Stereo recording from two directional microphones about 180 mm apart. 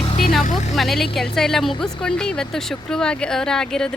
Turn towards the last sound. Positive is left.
turn(degrees=5)  # may be behind; listen again after turning